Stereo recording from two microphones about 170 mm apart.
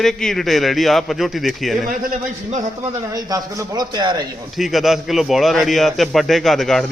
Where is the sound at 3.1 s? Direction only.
20° right (ahead or behind).